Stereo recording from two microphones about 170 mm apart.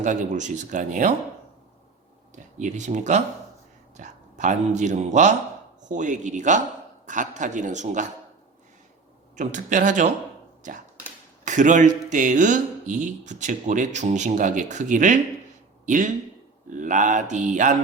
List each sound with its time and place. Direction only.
0.0 s speech: 45° right (ahead or behind)
2.3 s speech: 45° right (ahead or behind)
9.3 s speech: 45° right (ahead or behind)